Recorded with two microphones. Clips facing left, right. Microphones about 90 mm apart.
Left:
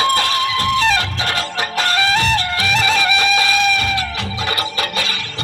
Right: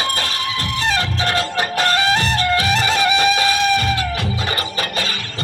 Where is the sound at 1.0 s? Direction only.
40° right (ahead or behind).